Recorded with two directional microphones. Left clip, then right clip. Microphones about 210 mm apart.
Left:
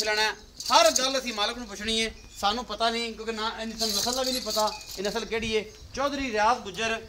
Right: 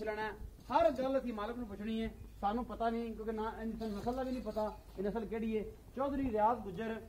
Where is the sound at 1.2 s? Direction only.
55° left (ahead or behind).